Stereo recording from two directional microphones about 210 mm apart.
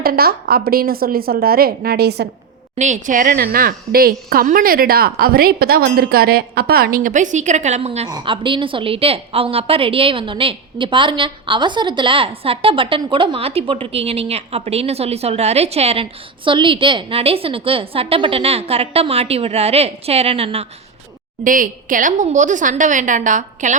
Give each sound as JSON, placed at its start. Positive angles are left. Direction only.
{"t": 0.0, "sound": "a woman's voice", "side_deg": -45}
{"t": 2.7, "sound": "a woman's voice", "side_deg": -35}
{"t": 21.4, "sound": "a woman's voice", "side_deg": -40}